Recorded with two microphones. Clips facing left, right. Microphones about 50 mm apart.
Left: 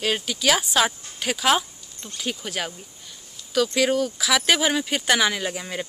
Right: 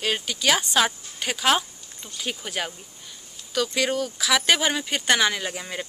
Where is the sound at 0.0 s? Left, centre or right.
Centre.